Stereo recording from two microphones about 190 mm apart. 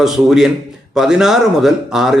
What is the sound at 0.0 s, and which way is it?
A man's voice, centre (ahead or behind).